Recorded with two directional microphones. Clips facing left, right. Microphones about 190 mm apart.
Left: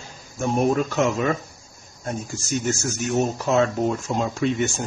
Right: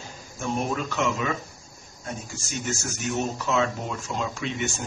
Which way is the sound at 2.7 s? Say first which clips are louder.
Left 3 dB; 45° left (ahead or behind).